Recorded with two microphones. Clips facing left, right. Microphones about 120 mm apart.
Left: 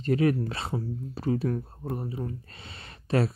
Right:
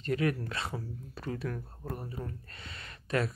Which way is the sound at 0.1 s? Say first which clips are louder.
Left 6 dB; 30° left (ahead or behind).